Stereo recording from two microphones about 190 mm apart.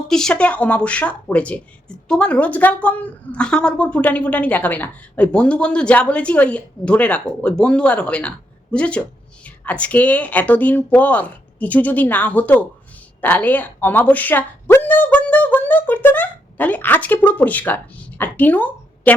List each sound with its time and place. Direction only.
0.1 s speech: 5° left (ahead or behind)